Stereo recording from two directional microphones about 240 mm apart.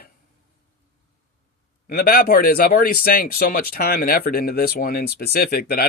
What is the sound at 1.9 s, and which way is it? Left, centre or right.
Speech, left.